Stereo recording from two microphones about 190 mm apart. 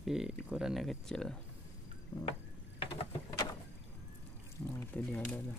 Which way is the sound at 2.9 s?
25° left (ahead or behind).